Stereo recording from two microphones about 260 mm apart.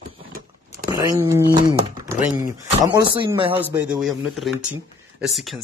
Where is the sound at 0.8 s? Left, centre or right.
Centre.